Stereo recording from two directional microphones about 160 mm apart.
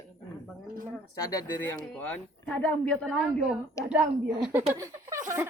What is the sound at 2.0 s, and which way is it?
Speech, 10° left (ahead or behind).